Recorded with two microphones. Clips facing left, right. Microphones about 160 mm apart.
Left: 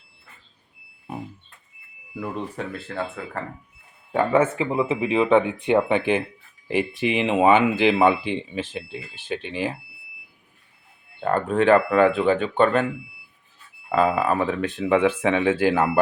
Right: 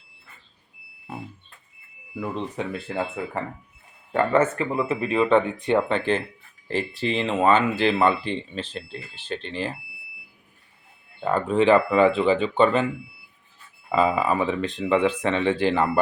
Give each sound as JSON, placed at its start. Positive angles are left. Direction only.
{"t": 2.3, "sound": "speech", "side_deg": 5}
{"t": 2.8, "sound": "speech", "side_deg": -20}
{"t": 4.1, "sound": "speech", "side_deg": 5}
{"t": 11.2, "sound": "speech", "side_deg": 0}
{"t": 13.9, "sound": "speech", "side_deg": 0}